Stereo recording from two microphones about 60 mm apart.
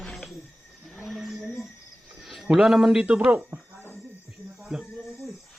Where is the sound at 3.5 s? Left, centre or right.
Right.